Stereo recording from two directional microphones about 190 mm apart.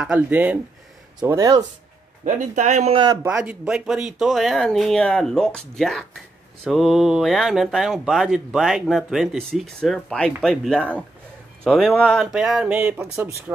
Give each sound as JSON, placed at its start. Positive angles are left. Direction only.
{"t": 0.0, "sound": "speech", "side_deg": -10}
{"t": 2.2, "sound": "speech", "side_deg": -40}
{"t": 3.3, "sound": "speech", "side_deg": -5}